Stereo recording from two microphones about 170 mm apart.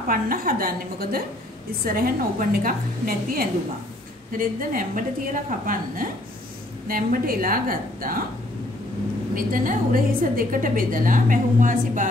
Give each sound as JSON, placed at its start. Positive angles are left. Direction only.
{"t": 0.1, "sound": "a woman's voice", "side_deg": -55}
{"t": 9.3, "sound": "a woman's voice", "side_deg": -55}